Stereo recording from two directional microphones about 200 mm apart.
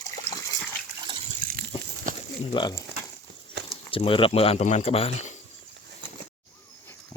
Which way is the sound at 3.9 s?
25° left (ahead or behind).